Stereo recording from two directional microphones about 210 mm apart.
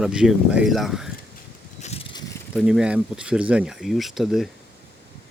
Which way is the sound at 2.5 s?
5° right (ahead or behind).